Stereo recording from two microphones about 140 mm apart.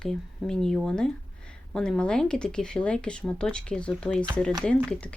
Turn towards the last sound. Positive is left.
turn(degrees=10)  # may be behind; listen again after turning